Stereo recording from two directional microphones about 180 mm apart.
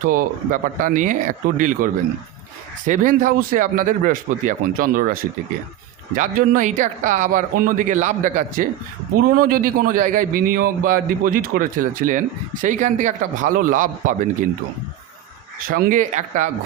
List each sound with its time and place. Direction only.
0.1 s a man's voice: 50° right (ahead or behind)
6.1 s a man's voice: 45° right (ahead or behind)
15.6 s a man's voice: 50° right (ahead or behind)